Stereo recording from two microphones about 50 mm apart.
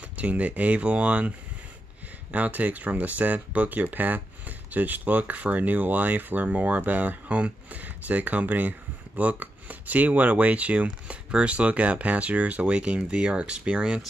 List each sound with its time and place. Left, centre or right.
0.2 s speech: right
2.3 s speech: right